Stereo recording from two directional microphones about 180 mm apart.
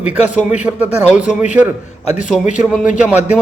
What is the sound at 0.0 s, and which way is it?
A man's voice, 5° right (ahead or behind).